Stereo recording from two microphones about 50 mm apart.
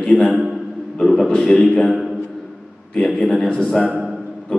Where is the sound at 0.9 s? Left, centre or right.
Centre.